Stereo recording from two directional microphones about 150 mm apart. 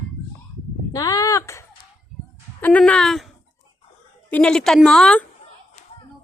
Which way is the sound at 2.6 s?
10° left (ahead or behind).